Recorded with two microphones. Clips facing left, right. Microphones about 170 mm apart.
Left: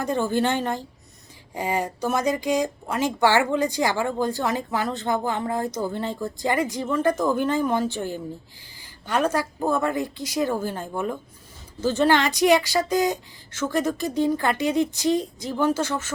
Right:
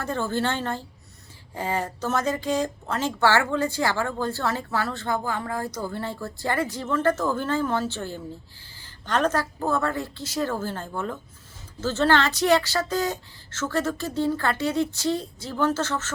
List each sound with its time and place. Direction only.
0.0 s speech: 15° left (ahead or behind)